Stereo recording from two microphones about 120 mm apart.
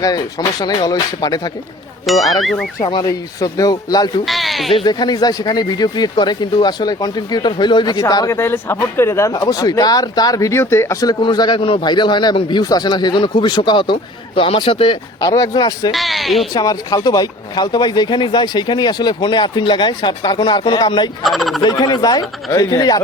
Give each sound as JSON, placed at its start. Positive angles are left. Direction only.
{"t": 0.0, "sound": "speech", "side_deg": 30}
{"t": 2.2, "sound": "speech", "side_deg": 0}
{"t": 2.8, "sound": "speech", "side_deg": 35}
{"t": 4.3, "sound": "a sound", "side_deg": 0}
{"t": 4.7, "sound": "speech", "side_deg": 45}
{"t": 8.4, "sound": "speech", "side_deg": 20}
{"t": 11.2, "sound": "speech", "side_deg": 40}
{"t": 15.2, "sound": "speech", "side_deg": 30}
{"t": 15.9, "sound": "speech", "side_deg": 0}
{"t": 16.6, "sound": "speech", "side_deg": 35}
{"t": 21.2, "sound": "speech", "side_deg": 0}
{"t": 21.6, "sound": "speech", "side_deg": 35}